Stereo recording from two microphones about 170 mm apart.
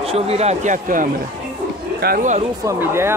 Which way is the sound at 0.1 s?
40° right (ahead or behind).